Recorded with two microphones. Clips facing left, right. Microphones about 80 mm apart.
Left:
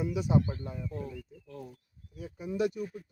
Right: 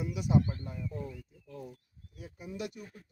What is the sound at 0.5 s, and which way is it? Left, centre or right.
Speech, left.